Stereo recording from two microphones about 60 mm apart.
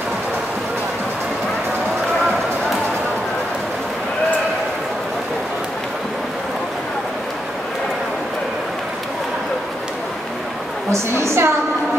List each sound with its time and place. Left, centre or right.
10.9 s a woman's voice: right